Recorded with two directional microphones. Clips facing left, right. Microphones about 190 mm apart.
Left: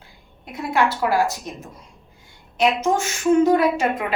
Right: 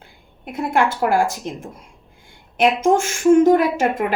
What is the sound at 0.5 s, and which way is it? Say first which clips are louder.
A woman's voice: right 2 dB; 50° right (ahead or behind).